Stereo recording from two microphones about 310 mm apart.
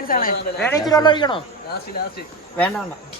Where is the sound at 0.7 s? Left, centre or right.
Centre.